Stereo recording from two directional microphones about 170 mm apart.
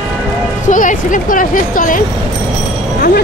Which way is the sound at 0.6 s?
50° left (ahead or behind).